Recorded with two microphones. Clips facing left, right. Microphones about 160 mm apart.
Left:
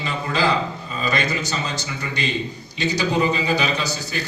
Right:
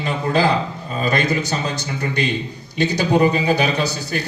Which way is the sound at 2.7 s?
55° right (ahead or behind).